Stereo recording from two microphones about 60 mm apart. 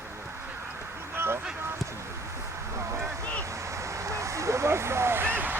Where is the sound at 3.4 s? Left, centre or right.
Right.